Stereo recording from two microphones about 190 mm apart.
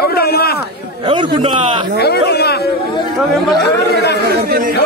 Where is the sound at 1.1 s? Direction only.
25° right (ahead or behind).